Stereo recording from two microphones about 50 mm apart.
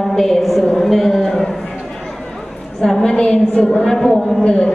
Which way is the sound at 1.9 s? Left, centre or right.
Centre.